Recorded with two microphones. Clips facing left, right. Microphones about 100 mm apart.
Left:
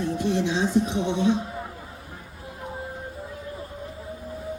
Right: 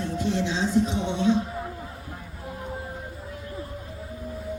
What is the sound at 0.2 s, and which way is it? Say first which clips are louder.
Music: left 1 dB; 15° left (ahead or behind).